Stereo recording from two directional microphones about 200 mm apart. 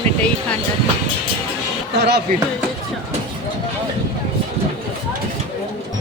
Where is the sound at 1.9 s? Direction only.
55° right (ahead or behind).